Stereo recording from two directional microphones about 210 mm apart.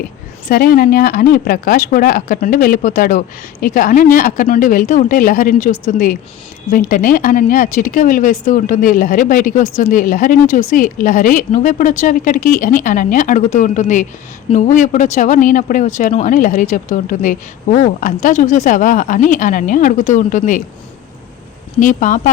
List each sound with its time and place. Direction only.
0.4 s speech: 45° left (ahead or behind)
21.8 s speech: 40° left (ahead or behind)